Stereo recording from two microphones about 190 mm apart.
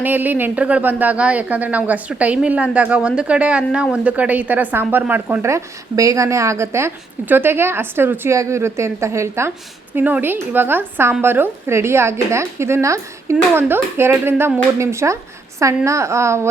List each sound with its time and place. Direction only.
0.0 s a woman's voice: 10° right (ahead or behind)